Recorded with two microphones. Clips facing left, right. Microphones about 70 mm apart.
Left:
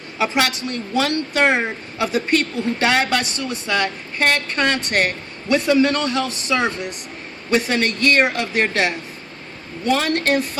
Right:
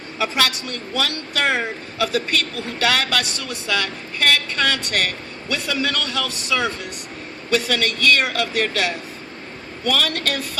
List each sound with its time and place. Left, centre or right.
0.2 s a woman's voice: left